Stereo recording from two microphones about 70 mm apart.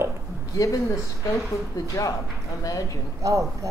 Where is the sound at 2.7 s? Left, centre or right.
Left.